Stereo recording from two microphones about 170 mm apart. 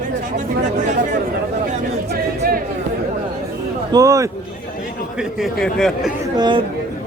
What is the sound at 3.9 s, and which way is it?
Speech, 20° right (ahead or behind).